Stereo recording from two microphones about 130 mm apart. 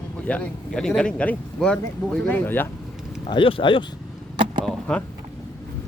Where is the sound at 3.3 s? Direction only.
40° left (ahead or behind).